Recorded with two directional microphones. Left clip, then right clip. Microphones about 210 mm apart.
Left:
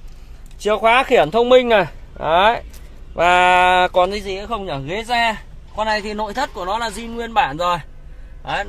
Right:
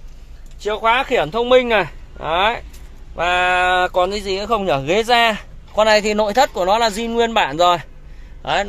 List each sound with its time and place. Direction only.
0.6 s speech: 30° left (ahead or behind); by 4.1 s 15° left (ahead or behind)
4.5 s a man's voice: 35° right (ahead or behind)